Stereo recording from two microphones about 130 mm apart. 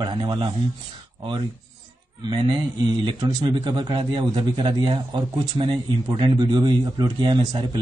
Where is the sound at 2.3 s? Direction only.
40° right (ahead or behind).